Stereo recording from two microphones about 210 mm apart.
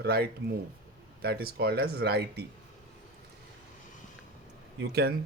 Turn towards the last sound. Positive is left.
turn(degrees=-50)  # may be behind; listen again after turning